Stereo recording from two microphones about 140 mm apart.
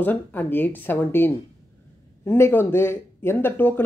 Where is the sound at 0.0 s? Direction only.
15° left (ahead or behind).